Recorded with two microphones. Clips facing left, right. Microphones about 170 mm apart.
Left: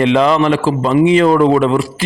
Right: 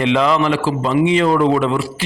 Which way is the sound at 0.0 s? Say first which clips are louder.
Left 4 dB; 40° left (ahead or behind).